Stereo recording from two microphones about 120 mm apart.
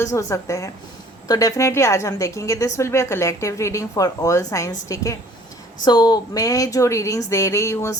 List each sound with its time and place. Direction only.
0.0 s a woman's voice: 30° left (ahead or behind)